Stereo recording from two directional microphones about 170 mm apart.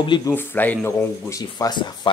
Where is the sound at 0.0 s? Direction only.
30° left (ahead or behind).